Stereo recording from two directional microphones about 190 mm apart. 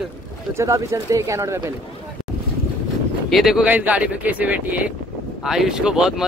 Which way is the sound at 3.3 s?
Centre (ahead or behind).